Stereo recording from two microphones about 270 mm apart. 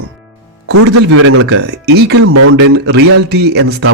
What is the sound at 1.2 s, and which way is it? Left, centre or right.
Speech, right.